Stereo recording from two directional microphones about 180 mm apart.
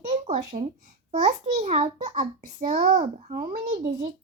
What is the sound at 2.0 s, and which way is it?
Speech, 30° right (ahead or behind).